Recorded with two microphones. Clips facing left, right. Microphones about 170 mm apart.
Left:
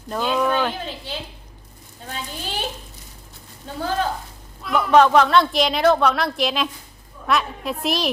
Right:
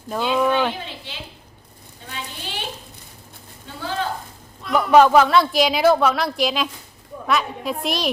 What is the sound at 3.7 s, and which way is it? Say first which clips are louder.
Speech: left 6 dB; 40° left (ahead or behind).